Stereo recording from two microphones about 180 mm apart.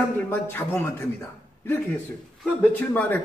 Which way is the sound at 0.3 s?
10° left (ahead or behind).